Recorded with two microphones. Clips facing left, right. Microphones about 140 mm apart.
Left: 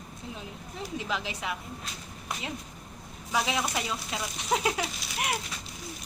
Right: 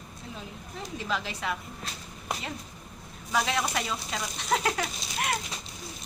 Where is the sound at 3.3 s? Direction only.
10° left (ahead or behind).